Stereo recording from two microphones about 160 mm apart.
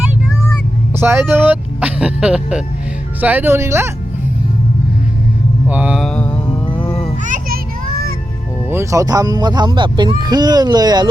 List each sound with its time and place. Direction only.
0.9 s speech: 15° right (ahead or behind)
5.6 s mantra: 10° right (ahead or behind)
6.1 s mantra: 5° left (ahead or behind)
7.3 s children playing: 60° right (ahead or behind)
8.7 s speech: 20° right (ahead or behind)